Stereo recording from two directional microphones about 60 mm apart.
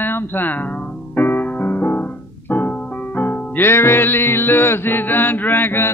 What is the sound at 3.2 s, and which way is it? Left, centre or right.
Music, left.